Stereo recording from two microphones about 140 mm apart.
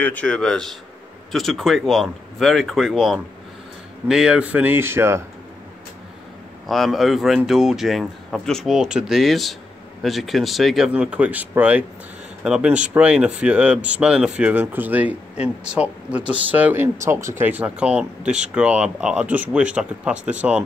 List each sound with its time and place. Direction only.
0.0 s speech: 10° left (ahead or behind); by 5.2 s 20° right (ahead or behind)
6.7 s speech: centre (ahead or behind)